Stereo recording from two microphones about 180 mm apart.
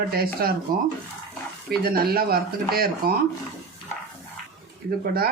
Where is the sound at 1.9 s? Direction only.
55° right (ahead or behind).